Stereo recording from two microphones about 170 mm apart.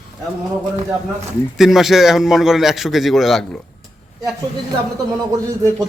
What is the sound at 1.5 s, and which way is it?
Speech, centre (ahead or behind).